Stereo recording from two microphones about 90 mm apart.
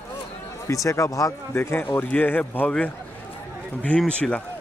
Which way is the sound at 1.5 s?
25° left (ahead or behind).